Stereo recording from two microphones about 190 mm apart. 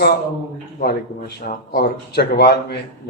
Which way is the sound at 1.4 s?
55° left (ahead or behind).